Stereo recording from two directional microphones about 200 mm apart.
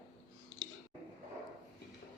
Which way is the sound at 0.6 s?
75° left (ahead or behind).